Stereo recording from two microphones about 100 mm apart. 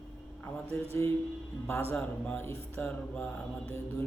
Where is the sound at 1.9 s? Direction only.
20° left (ahead or behind).